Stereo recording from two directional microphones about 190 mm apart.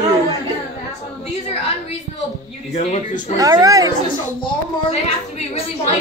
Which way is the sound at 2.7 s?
35° left (ahead or behind).